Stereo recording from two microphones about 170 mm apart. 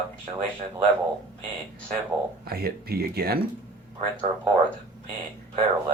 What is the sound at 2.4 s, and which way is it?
Speech, 65° right (ahead or behind).